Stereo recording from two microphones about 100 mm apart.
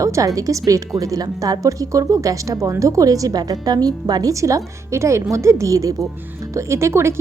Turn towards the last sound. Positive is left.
turn(degrees=-25)  # may be behind; listen again after turning